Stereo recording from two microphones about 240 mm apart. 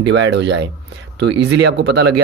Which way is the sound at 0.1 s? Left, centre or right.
Right.